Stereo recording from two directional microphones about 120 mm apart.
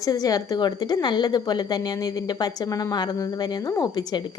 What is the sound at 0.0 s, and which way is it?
A woman's voice, 30° left (ahead or behind).